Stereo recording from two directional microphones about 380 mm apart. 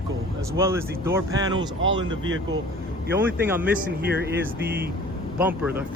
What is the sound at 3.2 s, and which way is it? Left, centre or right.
Speech, centre.